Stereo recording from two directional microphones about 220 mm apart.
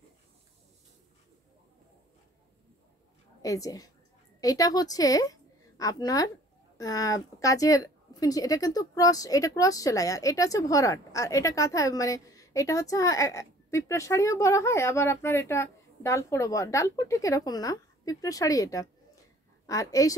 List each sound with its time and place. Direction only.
3.4 s a woman's voice: 15° left (ahead or behind)